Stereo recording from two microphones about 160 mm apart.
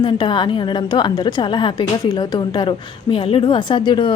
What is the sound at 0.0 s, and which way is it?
A woman's voice, 30° left (ahead or behind).